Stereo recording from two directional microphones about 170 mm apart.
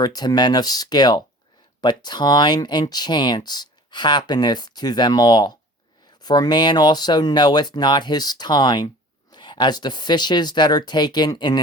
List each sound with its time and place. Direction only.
0.0 s speech: 25° left (ahead or behind)